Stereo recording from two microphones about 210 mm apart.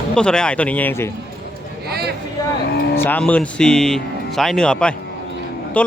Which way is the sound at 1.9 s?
50° right (ahead or behind).